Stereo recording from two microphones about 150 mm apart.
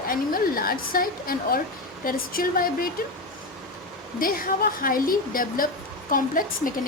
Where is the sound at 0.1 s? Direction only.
75° left (ahead or behind).